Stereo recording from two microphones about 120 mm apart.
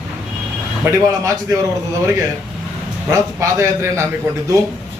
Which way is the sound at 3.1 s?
25° right (ahead or behind).